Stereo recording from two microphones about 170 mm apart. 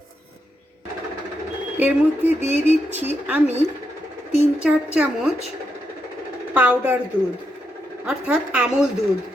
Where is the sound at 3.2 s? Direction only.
10° right (ahead or behind).